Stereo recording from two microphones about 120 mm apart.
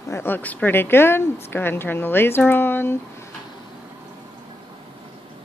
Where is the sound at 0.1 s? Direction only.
15° left (ahead or behind).